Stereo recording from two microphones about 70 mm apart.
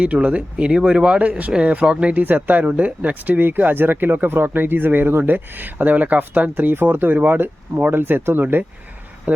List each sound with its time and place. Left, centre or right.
0.0 s speech: centre